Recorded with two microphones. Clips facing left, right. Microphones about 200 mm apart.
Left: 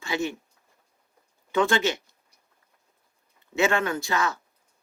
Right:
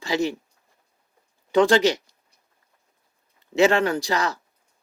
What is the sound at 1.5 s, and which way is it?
Speech, 35° right (ahead or behind).